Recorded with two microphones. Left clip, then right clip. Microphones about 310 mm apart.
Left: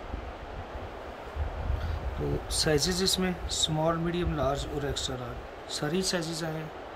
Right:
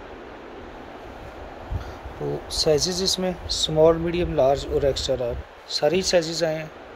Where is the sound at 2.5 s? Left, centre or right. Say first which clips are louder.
Right 7 dB; centre.